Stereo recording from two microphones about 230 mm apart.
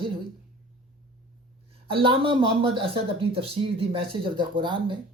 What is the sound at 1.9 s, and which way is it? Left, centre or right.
Speech, right.